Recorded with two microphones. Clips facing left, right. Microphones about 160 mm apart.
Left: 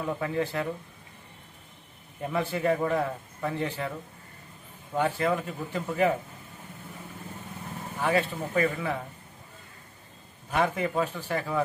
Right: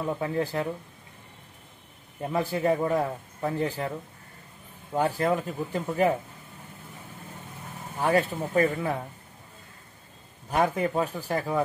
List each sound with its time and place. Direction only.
0.2 s a man's voice: 35° right (ahead or behind)
2.3 s a man's voice: 35° right (ahead or behind)
4.9 s a man's voice: 35° right (ahead or behind)
8.0 s a man's voice: 40° right (ahead or behind)
10.5 s a man's voice: 40° right (ahead or behind)